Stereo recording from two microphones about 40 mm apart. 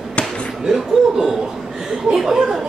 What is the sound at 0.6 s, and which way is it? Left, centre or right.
Speech, centre.